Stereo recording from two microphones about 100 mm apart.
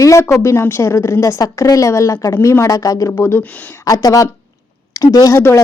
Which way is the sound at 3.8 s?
35° left (ahead or behind).